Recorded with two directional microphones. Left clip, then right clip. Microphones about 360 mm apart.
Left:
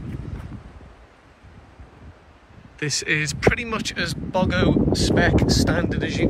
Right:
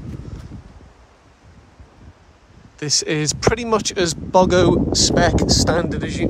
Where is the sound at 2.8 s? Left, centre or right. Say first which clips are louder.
Right 2 dB; centre.